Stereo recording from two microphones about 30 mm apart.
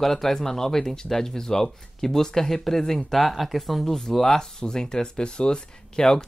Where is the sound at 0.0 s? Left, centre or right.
Centre.